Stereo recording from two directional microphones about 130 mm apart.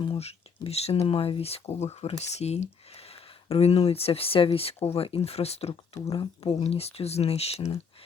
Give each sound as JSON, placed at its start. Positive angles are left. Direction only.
{"t": 0.0, "sound": "speech", "side_deg": 50}